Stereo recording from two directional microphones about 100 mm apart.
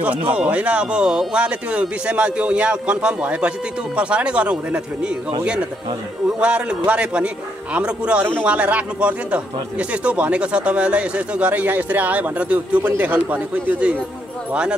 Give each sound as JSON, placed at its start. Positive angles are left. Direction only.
{"t": 0.3, "sound": "speech", "side_deg": -15}
{"t": 6.4, "sound": "speech", "side_deg": -10}